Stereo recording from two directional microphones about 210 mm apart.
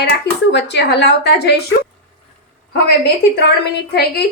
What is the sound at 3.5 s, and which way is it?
Speech, 50° left (ahead or behind).